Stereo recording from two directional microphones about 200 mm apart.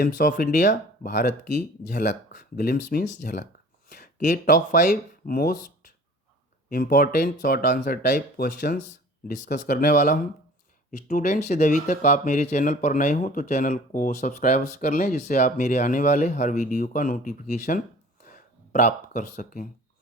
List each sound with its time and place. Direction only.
0.0 s speech: 45° left (ahead or behind)
6.7 s speech: 45° left (ahead or behind)